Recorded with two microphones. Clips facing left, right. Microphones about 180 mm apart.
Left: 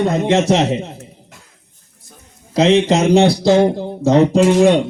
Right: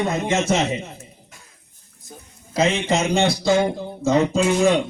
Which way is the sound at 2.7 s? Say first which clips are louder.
Left 9 dB; 35° left (ahead or behind).